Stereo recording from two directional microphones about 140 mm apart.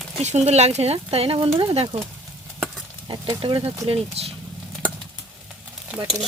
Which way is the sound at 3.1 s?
35° right (ahead or behind).